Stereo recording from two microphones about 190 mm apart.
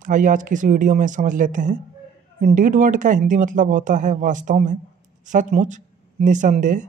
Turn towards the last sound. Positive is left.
turn(degrees=-40)  # may be behind; listen again after turning